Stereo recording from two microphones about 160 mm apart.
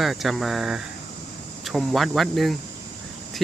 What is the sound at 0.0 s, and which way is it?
Speech, centre (ahead or behind).